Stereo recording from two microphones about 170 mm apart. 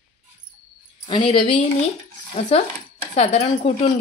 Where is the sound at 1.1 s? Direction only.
30° left (ahead or behind).